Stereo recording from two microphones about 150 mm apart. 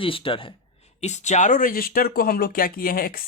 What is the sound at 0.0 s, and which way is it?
Speech, 35° left (ahead or behind).